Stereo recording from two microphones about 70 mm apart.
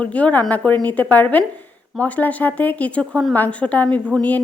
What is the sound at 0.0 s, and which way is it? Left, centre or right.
A woman's voice, centre.